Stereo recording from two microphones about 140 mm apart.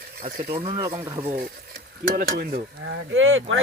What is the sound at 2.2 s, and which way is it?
Stir, 80° right.